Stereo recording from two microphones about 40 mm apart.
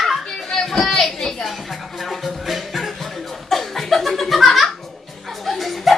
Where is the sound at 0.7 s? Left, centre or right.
Centre.